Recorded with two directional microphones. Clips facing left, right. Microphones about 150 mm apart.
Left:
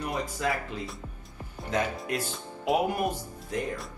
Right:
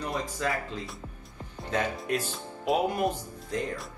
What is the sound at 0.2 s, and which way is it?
Speech, 10° left (ahead or behind).